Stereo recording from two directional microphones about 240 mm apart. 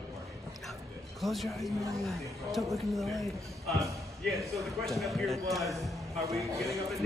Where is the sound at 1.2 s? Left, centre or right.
Centre.